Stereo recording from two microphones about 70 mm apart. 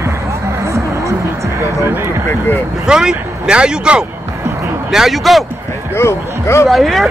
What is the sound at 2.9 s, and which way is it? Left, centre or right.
Speech, centre.